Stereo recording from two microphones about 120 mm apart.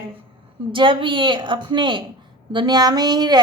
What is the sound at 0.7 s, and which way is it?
A woman's voice, 45° right (ahead or behind).